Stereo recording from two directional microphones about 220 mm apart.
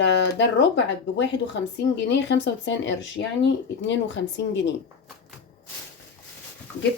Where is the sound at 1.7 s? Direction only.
55° left (ahead or behind).